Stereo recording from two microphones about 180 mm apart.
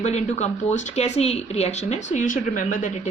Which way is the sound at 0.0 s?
40° left (ahead or behind).